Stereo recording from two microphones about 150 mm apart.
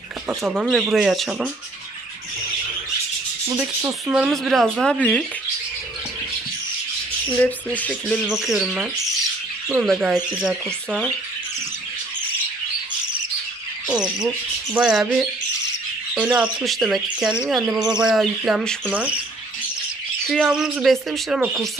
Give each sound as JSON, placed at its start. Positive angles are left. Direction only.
{"t": 0.3, "sound": "speech", "side_deg": -5}
{"t": 3.4, "sound": "speech", "side_deg": -15}
{"t": 4.1, "sound": "speech", "side_deg": -5}
{"t": 7.3, "sound": "speech", "side_deg": 10}
{"t": 8.2, "sound": "speech", "side_deg": 0}
{"t": 9.8, "sound": "speech", "side_deg": -5}
{"t": 13.9, "sound": "speech", "side_deg": -5}
{"t": 16.6, "sound": "speech", "side_deg": 0}
{"t": 17.6, "sound": "bird", "side_deg": -25}
{"t": 18.0, "sound": "speech", "side_deg": 0}
{"t": 18.9, "sound": "speech", "side_deg": -10}
{"t": 20.2, "sound": "speech", "side_deg": 0}